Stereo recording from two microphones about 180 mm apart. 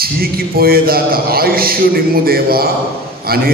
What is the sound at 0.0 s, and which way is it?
A man's voice, 55° right (ahead or behind).